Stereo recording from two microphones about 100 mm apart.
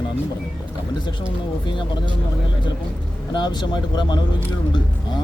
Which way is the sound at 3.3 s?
50° left (ahead or behind).